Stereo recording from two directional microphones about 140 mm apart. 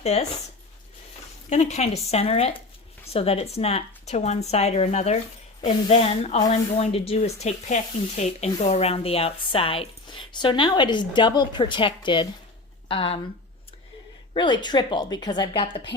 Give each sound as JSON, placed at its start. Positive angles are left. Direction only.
{"t": 0.0, "sound": "speech", "side_deg": 50}
{"t": 1.5, "sound": "a woman's voice", "side_deg": 50}
{"t": 14.3, "sound": "a woman's voice", "side_deg": 35}